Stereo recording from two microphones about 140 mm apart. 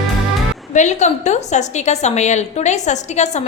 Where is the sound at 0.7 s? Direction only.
55° left (ahead or behind).